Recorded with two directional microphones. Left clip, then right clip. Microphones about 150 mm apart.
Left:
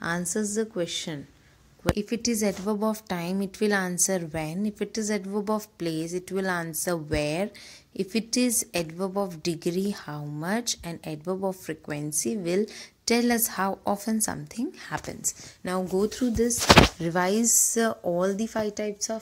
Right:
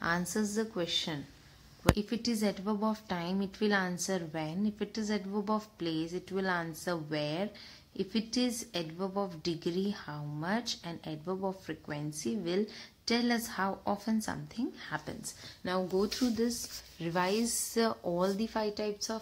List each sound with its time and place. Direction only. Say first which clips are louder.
0.0 s a woman's voice: left 4 dB; 30° left (ahead or behind)
17.0 s speech: left 6 dB; 45° left (ahead or behind)
17.7 s speech: left 6 dB; 25° left (ahead or behind)